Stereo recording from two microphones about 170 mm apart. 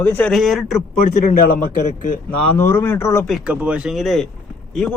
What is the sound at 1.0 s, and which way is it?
A man's voice, 55° left (ahead or behind).